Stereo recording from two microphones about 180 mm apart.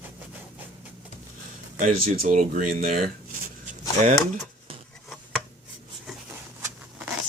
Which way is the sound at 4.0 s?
40° right (ahead or behind).